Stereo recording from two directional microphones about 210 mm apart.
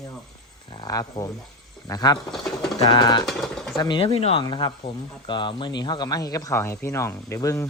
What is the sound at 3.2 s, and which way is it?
Speech, centre (ahead or behind).